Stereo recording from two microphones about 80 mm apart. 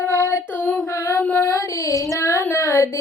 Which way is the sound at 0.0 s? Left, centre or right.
Left.